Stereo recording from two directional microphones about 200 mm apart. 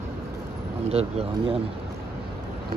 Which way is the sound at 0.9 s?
30° right (ahead or behind).